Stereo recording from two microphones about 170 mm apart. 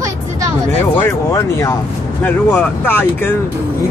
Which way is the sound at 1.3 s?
15° left (ahead or behind).